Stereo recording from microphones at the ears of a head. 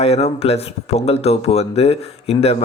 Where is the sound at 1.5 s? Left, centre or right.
Left.